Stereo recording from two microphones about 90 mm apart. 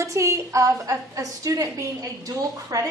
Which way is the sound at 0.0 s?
35° right (ahead or behind).